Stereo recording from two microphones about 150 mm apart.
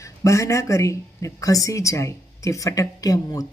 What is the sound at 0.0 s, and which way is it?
Speech, 20° left (ahead or behind).